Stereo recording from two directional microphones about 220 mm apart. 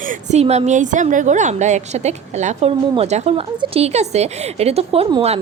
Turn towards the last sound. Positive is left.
turn(degrees=-25)  # may be behind; listen again after turning